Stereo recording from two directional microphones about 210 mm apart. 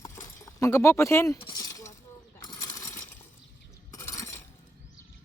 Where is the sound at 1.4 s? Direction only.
20° left (ahead or behind).